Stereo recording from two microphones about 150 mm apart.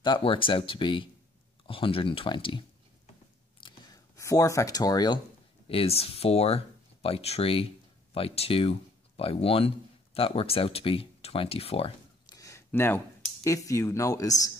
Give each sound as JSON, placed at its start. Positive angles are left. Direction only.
{"t": 0.0, "sound": "speech", "side_deg": 35}
{"t": 3.6, "sound": "a sound", "side_deg": 25}
{"t": 5.7, "sound": "speech", "side_deg": 40}
{"t": 12.3, "sound": "speech", "side_deg": 20}